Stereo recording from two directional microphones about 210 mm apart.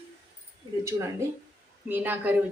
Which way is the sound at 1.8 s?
10° right (ahead or behind).